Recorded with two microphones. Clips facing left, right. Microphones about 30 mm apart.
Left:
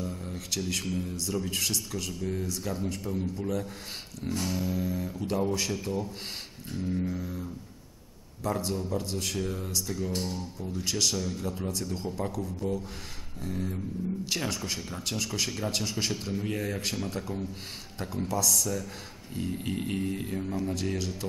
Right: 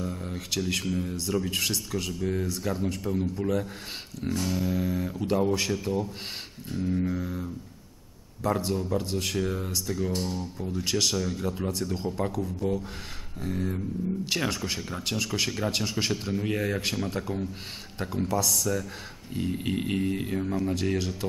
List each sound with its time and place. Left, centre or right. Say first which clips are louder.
0.0 s a sound: right 3 dB; centre
0.8 s speech: right 3 dB; centre
4.3 s guitar: right 2 dB; centre
4.7 s speech: right 3 dB; centre
5.7 s speech: right 3 dB; centre
7.1 s a sound: right 4 dB; right
8.5 s a sound: right 3 dB; centre
9.1 s speech: right 4 dB; centre
10.1 s guitar: right 2 dB; centre
10.7 s speech: right 2 dB; centre
12.4 s guitar: right 3 dB; centre
13.4 s speech: right 3 dB; centre